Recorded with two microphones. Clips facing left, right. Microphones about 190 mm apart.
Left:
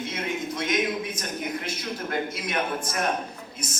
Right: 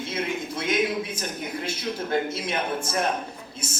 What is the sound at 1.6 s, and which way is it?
A man's voice, 30° right (ahead or behind).